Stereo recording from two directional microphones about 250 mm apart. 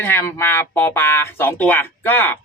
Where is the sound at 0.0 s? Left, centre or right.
Centre.